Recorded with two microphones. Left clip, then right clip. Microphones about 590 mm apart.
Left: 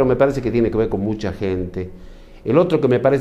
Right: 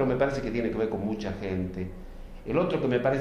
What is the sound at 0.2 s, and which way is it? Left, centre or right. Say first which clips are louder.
Speech: left 10 dB; left.